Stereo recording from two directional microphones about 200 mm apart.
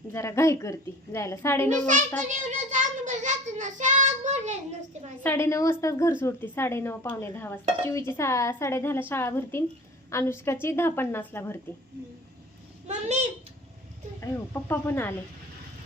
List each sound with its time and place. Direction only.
0.1 s a woman's voice: 15° left (ahead or behind)
2.1 s a child's voice: 40° right (ahead or behind)
5.2 s a woman's voice: 10° left (ahead or behind)
12.9 s a child's voice: 35° right (ahead or behind)
14.2 s a woman's voice: 10° left (ahead or behind)